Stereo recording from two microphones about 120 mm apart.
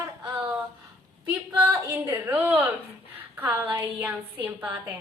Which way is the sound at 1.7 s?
20° right (ahead or behind).